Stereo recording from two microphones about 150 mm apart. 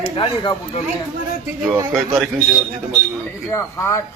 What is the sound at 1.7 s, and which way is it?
Speech, 20° right (ahead or behind).